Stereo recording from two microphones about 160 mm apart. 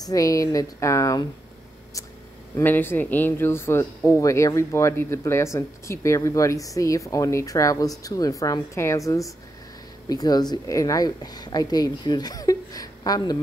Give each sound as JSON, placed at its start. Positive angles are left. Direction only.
{"t": 0.0, "sound": "speech", "side_deg": 20}
{"t": 2.5, "sound": "speech", "side_deg": 15}